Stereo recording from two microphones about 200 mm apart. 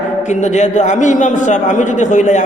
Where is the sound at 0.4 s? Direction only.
35° left (ahead or behind).